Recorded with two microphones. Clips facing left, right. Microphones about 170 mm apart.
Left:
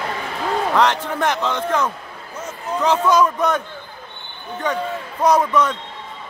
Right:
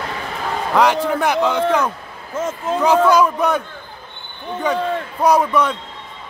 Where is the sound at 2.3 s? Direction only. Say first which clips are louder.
Right 8 dB; 90° right.